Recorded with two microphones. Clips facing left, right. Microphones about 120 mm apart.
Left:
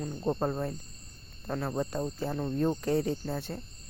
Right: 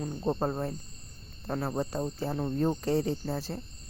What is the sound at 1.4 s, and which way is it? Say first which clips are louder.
Speech: right 1 dB; 20° right (ahead or behind).